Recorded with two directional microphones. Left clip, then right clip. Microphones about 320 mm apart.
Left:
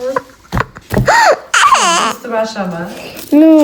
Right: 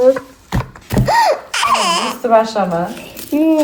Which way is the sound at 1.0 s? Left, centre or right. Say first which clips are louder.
Left 4 dB; left.